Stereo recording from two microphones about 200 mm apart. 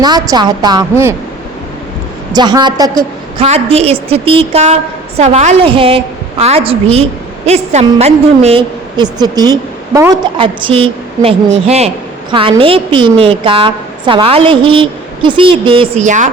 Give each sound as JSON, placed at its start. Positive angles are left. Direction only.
{"t": 0.0, "sound": "a woman's voice", "side_deg": -20}
{"t": 2.3, "sound": "a woman's voice", "side_deg": -20}
{"t": 3.4, "sound": "a woman's voice", "side_deg": -30}
{"t": 16.0, "sound": "a woman's voice", "side_deg": -40}